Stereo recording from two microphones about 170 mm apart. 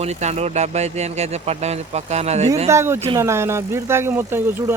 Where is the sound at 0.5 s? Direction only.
40° right (ahead or behind).